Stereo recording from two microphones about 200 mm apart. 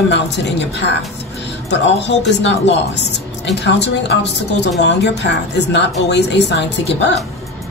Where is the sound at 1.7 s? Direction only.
60° left (ahead or behind).